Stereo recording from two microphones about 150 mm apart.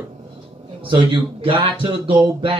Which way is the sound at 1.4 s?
35° right (ahead or behind).